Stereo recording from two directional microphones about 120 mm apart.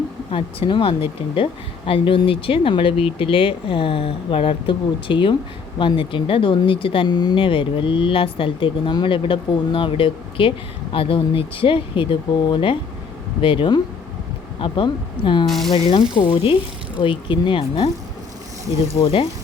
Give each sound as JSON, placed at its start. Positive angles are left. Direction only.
{"t": 0.3, "sound": "speech", "side_deg": 45}
{"t": 15.4, "sound": "speech", "side_deg": 0}
{"t": 15.7, "sound": "speech", "side_deg": 45}
{"t": 19.0, "sound": "speech", "side_deg": 50}